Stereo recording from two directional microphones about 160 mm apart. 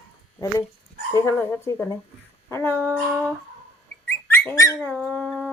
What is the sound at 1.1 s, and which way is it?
Speech, 15° left (ahead or behind).